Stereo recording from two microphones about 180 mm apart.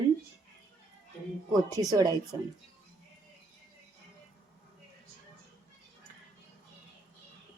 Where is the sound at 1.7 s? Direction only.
20° right (ahead or behind).